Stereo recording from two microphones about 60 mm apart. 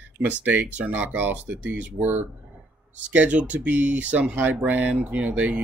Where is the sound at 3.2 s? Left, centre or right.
Right.